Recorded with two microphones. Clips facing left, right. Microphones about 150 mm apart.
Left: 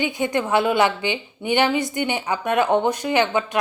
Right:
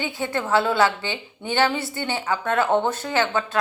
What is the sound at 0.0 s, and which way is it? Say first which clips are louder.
A woman's voice: left 4 dB; 15° left (ahead or behind).